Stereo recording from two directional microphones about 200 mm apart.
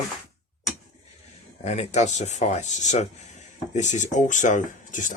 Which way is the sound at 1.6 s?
35° left (ahead or behind).